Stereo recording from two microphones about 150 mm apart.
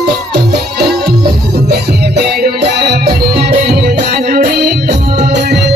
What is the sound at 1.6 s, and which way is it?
Music, 90° right.